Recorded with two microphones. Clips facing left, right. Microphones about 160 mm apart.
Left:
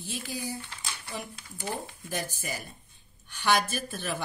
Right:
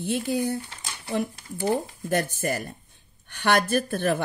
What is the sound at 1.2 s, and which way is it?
Speech, 50° right (ahead or behind).